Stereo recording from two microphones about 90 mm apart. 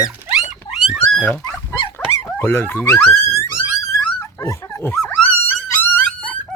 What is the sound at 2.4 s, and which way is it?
Speech, 25° left (ahead or behind).